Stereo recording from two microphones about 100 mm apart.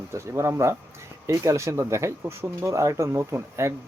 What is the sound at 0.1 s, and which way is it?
Speech, 25° right (ahead or behind).